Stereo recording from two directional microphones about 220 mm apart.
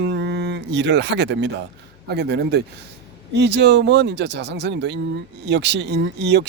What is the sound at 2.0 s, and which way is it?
Speech, 50° right (ahead or behind).